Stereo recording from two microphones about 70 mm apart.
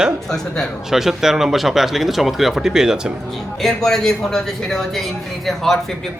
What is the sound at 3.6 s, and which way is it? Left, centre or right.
Speech, centre.